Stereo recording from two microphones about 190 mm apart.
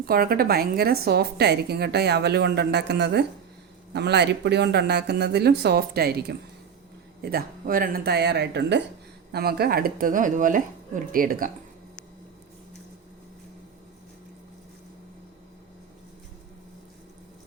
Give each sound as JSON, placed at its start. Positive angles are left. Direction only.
{"t": 0.0, "sound": "a woman's voice", "side_deg": -50}